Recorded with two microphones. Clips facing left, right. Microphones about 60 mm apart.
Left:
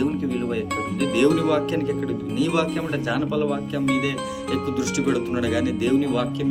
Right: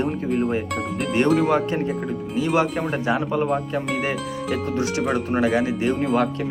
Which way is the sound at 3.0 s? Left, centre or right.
Right.